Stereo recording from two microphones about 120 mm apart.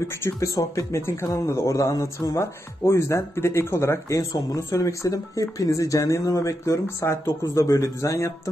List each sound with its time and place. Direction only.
0.2 s speech: 25° left (ahead or behind)